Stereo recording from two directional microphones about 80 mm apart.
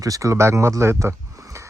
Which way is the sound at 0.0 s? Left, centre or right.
Right.